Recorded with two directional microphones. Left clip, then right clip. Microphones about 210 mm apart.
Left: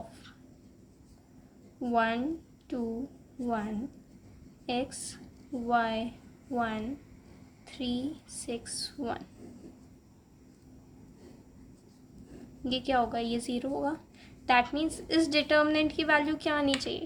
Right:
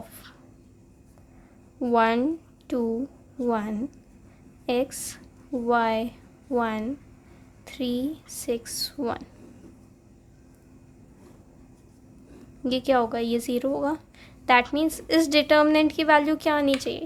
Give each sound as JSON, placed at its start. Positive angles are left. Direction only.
{"t": 1.8, "sound": "a woman's voice", "side_deg": -30}
{"t": 12.6, "sound": "a woman's voice", "side_deg": -30}